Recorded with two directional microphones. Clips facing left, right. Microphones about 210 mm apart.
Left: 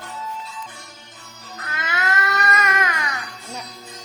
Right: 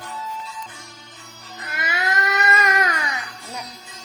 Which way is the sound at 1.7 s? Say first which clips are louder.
Even; 10° right (ahead or behind).